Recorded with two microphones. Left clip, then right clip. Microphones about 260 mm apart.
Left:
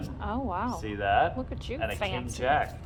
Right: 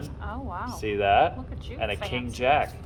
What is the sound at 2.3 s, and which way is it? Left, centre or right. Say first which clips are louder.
Speech: right 4 dB; right.